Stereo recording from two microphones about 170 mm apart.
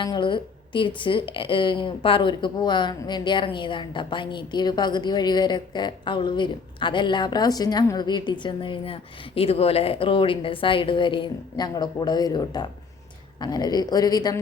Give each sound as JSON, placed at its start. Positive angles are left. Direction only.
{"t": 0.0, "sound": "a woman's voice", "side_deg": 30}